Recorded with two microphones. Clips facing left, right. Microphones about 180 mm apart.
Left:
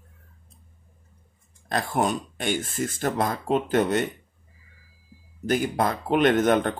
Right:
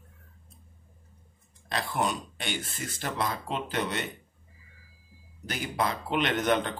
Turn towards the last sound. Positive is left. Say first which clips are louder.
# left 7 dB
turn(degrees=50)  # may be behind; listen again after turning